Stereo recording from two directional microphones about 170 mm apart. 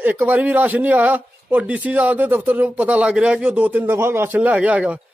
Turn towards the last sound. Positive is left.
turn(degrees=-5)  # may be behind; listen again after turning